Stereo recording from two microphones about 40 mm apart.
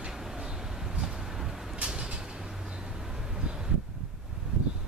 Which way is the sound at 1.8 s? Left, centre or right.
Right.